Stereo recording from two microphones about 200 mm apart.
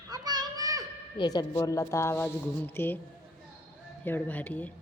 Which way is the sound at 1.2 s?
20° left (ahead or behind).